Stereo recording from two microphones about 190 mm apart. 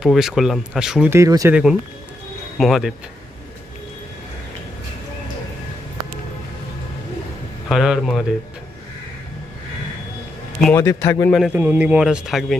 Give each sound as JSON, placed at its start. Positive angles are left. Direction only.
{"t": 0.0, "sound": "speech", "side_deg": 0}
{"t": 2.6, "sound": "speech", "side_deg": 0}
{"t": 7.7, "sound": "speech", "side_deg": 0}
{"t": 10.7, "sound": "a man's voice", "side_deg": 15}
{"t": 11.3, "sound": "speech", "side_deg": -5}